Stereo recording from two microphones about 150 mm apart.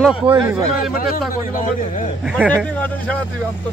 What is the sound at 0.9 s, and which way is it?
A man's voice, 75° left (ahead or behind).